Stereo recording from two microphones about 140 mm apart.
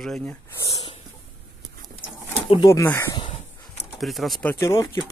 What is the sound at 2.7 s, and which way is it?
Speech, 20° left (ahead or behind).